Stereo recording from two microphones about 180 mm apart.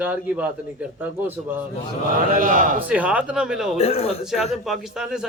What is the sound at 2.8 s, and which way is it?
A man's voice, 10° right (ahead or behind).